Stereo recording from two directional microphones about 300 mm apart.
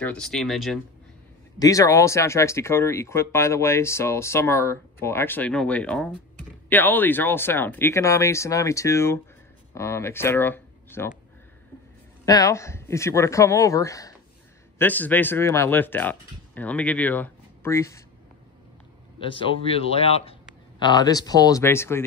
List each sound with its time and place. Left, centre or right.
0.0 s speech: centre
1.6 s speech: centre
12.3 s speech: centre
19.1 s speech: centre